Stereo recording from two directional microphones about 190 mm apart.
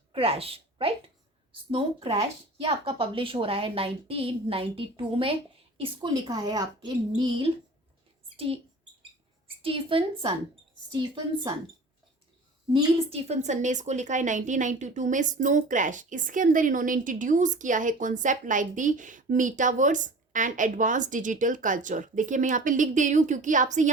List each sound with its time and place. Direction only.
0.1 s a woman's voice: 30° right (ahead or behind)
9.6 s a woman's voice: 30° right (ahead or behind)
12.7 s a woman's voice: 35° right (ahead or behind)